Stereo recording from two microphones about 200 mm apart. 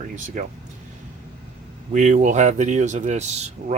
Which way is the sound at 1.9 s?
35° right (ahead or behind).